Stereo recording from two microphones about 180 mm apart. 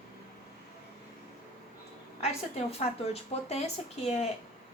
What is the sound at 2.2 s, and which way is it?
Speech, 35° left (ahead or behind).